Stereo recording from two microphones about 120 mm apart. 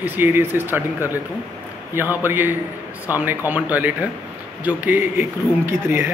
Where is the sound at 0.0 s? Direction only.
15° right (ahead or behind).